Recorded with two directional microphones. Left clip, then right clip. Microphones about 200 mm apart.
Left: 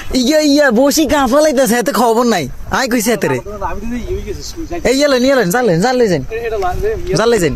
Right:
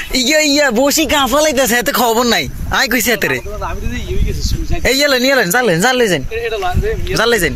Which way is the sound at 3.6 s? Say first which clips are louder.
Left 2 dB; 55° left (ahead or behind).